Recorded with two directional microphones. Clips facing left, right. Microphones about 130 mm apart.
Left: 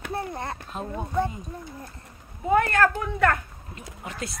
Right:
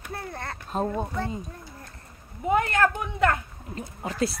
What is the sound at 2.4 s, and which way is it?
Speech, 20° right (ahead or behind).